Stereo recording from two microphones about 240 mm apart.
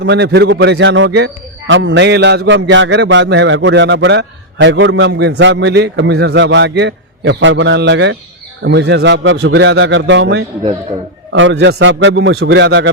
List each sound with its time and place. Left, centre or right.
0.0 s a man's voice: right